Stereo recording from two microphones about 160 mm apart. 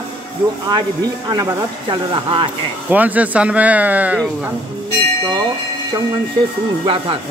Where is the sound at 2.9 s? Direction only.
10° right (ahead or behind).